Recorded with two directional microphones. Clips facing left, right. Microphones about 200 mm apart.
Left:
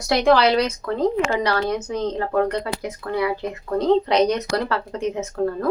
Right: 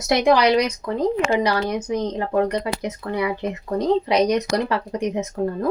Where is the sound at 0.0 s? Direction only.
20° right (ahead or behind).